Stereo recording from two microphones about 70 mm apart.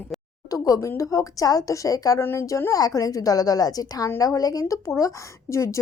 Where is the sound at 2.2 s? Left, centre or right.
Left.